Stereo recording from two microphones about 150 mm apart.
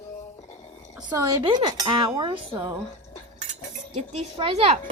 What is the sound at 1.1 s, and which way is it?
Speech, 25° right (ahead or behind).